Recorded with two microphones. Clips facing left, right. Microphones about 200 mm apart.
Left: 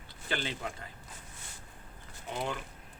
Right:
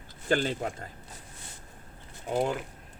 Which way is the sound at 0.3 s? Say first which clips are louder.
Right 9 dB; 45° right (ahead or behind).